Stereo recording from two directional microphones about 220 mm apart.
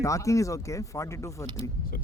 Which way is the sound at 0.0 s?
15° left (ahead or behind).